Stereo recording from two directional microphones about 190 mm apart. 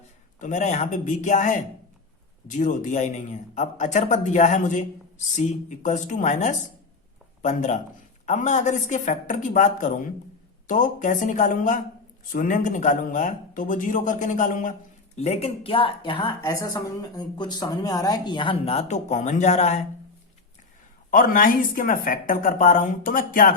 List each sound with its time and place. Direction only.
0.3 s a man's voice: 40° left (ahead or behind)
21.1 s speech: 50° left (ahead or behind)